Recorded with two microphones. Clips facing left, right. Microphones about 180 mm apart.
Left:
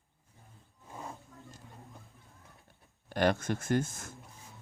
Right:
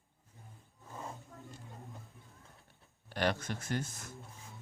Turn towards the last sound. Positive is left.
turn(degrees=50)  # may be behind; listen again after turning